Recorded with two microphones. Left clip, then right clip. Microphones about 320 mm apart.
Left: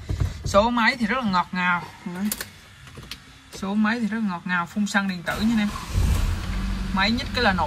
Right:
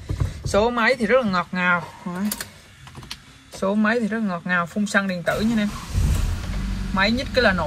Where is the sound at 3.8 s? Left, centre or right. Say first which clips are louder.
Even; centre.